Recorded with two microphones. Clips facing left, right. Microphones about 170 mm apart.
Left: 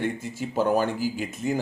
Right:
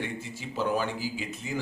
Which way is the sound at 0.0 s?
50° left (ahead or behind).